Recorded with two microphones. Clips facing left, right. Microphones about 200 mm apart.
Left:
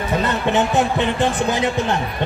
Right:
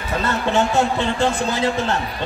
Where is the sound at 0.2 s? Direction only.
20° left (ahead or behind).